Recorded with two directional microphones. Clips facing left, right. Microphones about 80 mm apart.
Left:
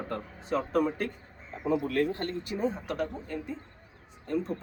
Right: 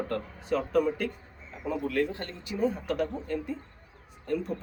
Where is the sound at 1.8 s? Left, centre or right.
Left.